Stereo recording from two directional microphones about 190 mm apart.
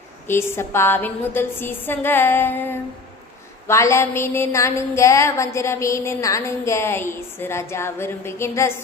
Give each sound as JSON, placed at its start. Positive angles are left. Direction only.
{"t": 0.3, "sound": "a woman's voice", "side_deg": 15}